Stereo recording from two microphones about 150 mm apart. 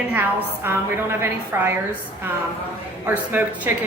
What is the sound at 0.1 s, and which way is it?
A woman's voice, 15° right (ahead or behind).